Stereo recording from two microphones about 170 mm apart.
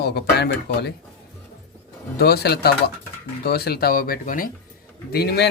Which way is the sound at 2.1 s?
70° left (ahead or behind).